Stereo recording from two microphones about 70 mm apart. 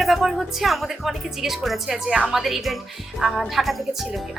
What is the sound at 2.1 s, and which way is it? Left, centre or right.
Speech, centre.